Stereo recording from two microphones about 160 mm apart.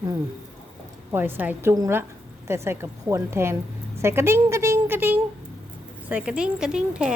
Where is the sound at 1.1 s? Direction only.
10° right (ahead or behind).